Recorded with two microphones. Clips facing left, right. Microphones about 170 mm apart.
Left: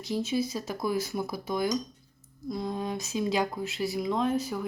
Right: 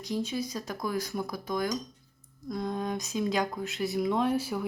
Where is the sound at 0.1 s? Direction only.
10° left (ahead or behind).